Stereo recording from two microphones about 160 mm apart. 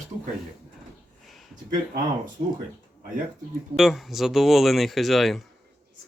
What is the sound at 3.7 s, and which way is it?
Speech, centre (ahead or behind).